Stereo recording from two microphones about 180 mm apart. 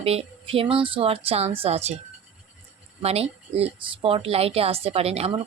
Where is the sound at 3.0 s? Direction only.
35° right (ahead or behind).